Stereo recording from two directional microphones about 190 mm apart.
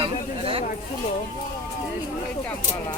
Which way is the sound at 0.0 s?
30° right (ahead or behind).